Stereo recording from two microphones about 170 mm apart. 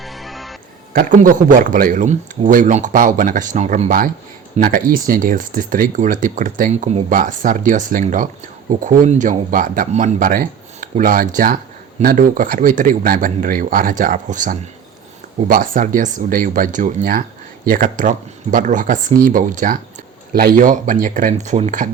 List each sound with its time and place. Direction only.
0.0 s music: centre (ahead or behind)
0.9 s speech: 50° right (ahead or behind)